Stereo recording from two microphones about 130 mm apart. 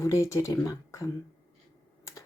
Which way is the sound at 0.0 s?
25° left (ahead or behind).